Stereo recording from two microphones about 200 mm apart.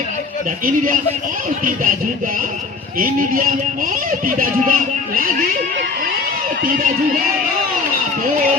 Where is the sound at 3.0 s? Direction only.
45° right (ahead or behind).